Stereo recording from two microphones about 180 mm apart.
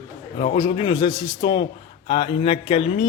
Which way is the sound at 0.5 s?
25° left (ahead or behind).